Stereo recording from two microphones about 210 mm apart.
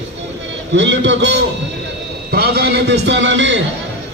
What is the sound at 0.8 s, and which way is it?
A man's voice, 60° right (ahead or behind).